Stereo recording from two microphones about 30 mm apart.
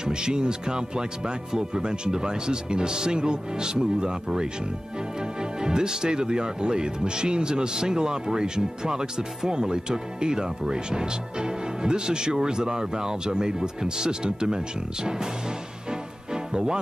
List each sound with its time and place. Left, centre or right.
0.0 s speech: right